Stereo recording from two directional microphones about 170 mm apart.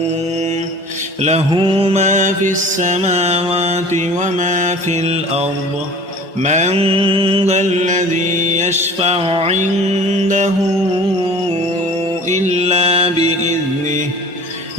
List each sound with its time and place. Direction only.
1.2 s mantra: 40° right (ahead or behind)
12.3 s mantra: 40° right (ahead or behind)